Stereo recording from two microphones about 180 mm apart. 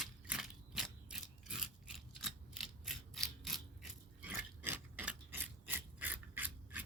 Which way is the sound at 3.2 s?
Centre (ahead or behind).